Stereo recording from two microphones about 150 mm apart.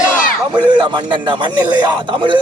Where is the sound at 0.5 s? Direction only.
30° right (ahead or behind).